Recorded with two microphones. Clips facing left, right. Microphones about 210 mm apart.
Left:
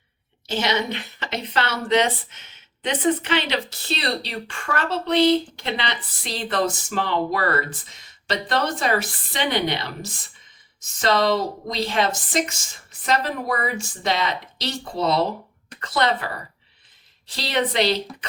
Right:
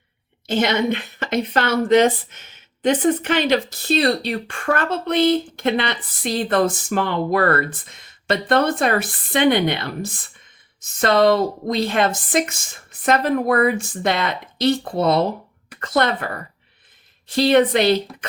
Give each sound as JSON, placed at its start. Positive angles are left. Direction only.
{"t": 0.4, "sound": "a woman's voice", "side_deg": -55}